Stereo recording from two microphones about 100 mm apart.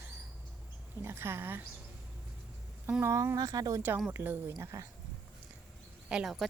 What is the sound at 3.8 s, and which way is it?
Speech, 20° right (ahead or behind).